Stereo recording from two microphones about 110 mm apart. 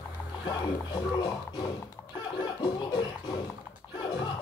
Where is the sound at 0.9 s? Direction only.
40° left (ahead or behind).